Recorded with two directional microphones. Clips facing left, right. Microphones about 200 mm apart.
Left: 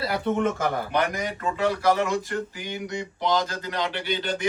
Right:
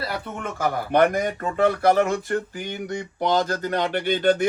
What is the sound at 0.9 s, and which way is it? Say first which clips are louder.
A man's voice: right 7 dB; 55° right (ahead or behind).